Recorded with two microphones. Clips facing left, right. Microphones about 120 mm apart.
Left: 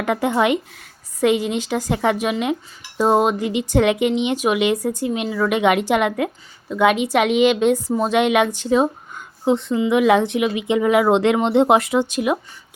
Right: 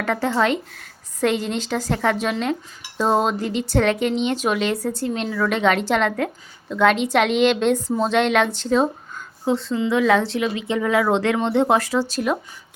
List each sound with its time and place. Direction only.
0.0 s speech: 15° left (ahead or behind)